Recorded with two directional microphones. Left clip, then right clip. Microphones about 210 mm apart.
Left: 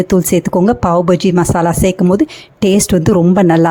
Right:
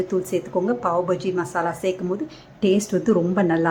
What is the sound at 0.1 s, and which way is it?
A woman's voice, 45° left (ahead or behind).